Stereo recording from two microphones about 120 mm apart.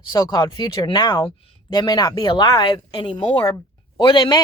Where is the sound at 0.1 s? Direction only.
30° left (ahead or behind).